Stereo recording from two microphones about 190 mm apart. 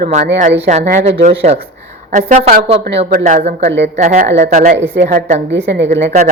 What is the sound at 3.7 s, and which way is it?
Speech, 65° right (ahead or behind).